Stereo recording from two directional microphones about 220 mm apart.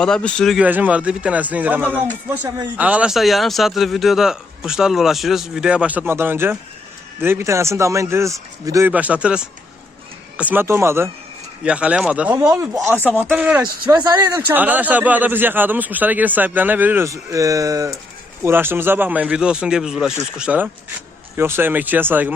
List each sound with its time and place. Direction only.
0.0 s speech: 5° left (ahead or behind)
13.9 s speech: 20° right (ahead or behind)